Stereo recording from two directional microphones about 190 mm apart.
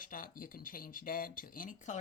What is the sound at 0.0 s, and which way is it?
Speech, 45° left (ahead or behind).